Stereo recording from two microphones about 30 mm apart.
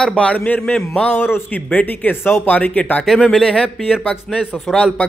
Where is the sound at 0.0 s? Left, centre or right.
Left.